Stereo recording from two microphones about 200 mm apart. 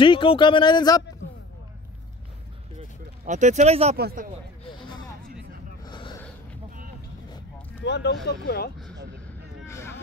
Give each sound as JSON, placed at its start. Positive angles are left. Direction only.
{"t": 0.0, "sound": "speech", "side_deg": 25}
{"t": 3.3, "sound": "speech", "side_deg": -35}
{"t": 3.9, "sound": "speech", "side_deg": -50}
{"t": 4.6, "sound": "a sound", "side_deg": 25}
{"t": 5.9, "sound": "gasp", "side_deg": 25}
{"t": 7.8, "sound": "speech", "side_deg": 60}
{"t": 9.7, "sound": "a sound", "side_deg": 15}